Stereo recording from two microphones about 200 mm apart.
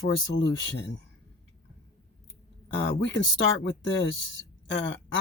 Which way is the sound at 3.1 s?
70° left (ahead or behind).